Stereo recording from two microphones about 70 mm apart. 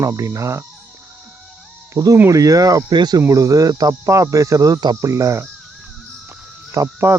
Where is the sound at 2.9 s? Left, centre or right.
Right.